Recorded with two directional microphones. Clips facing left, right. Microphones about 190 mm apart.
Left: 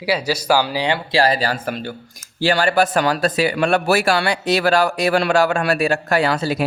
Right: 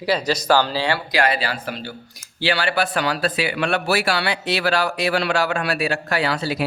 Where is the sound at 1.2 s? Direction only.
35° left (ahead or behind).